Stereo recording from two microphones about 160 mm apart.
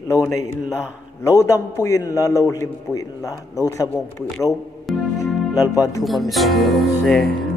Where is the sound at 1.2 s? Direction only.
20° left (ahead or behind).